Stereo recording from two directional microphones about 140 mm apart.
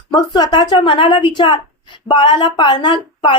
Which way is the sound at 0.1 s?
30° left (ahead or behind).